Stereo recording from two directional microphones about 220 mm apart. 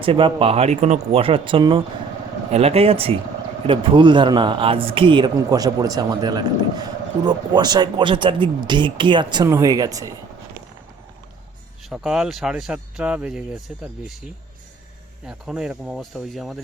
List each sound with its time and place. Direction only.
0.0 s a man's voice: 20° right (ahead or behind)
11.9 s speech: 5° right (ahead or behind)
15.3 s speech: 5° right (ahead or behind)